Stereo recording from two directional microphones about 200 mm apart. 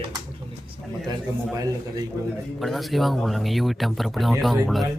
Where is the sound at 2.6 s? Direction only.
Centre (ahead or behind).